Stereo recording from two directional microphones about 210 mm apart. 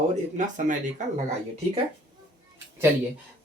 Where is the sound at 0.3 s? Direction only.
35° right (ahead or behind).